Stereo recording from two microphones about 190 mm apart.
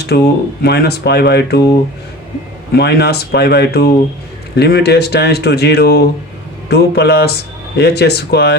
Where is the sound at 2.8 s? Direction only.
60° left (ahead or behind).